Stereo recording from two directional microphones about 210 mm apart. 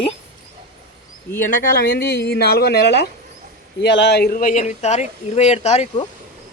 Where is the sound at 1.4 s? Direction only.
40° left (ahead or behind).